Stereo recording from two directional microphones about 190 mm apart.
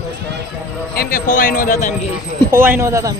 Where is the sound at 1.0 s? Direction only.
45° left (ahead or behind).